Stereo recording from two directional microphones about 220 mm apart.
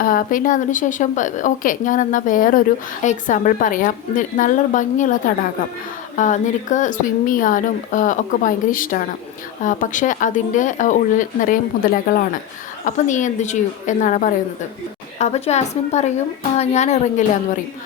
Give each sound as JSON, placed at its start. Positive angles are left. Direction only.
{"t": 0.0, "sound": "speech", "side_deg": 40}